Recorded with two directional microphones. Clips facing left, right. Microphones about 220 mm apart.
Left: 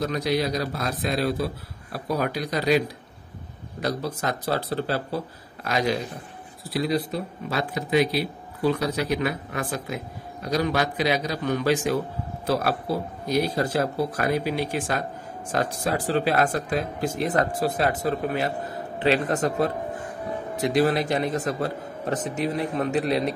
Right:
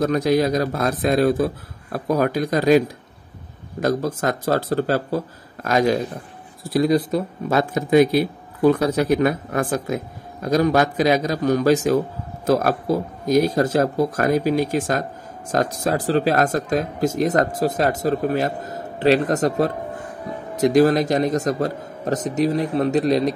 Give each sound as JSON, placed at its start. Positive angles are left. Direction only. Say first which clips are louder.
{"t": 0.0, "sound": "a man's voice", "louder": "right 7 dB", "side_deg": -45}
{"t": 3.8, "sound": "a man's voice", "louder": "right 6 dB", "side_deg": -45}